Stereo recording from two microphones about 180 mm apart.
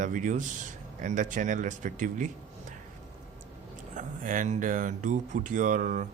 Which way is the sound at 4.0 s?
45° right (ahead or behind).